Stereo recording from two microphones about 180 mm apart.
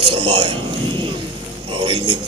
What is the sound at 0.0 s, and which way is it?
Speech, 30° right (ahead or behind).